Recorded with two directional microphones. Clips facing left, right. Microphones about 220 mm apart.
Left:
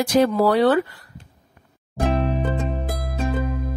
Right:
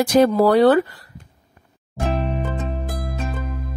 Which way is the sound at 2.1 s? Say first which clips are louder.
Left 1 dB; centre (ahead or behind).